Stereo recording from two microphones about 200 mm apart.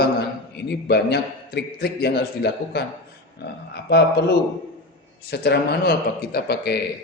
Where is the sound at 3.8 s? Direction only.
55° left (ahead or behind).